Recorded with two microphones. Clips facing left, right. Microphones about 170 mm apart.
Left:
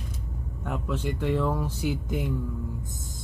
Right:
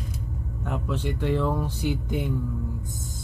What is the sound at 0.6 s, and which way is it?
Speech, 5° left (ahead or behind).